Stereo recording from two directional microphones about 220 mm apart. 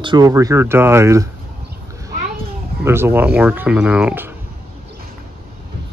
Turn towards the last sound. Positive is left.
turn(degrees=-5)  # may be behind; listen again after turning